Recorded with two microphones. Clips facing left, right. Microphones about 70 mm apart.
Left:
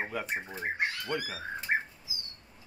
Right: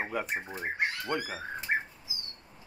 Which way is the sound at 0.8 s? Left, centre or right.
Right.